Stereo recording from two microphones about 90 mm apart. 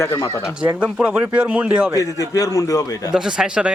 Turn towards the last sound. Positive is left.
turn(degrees=-10)  # may be behind; listen again after turning